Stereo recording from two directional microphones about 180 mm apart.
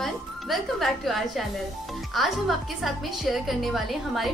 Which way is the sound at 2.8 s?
Centre (ahead or behind).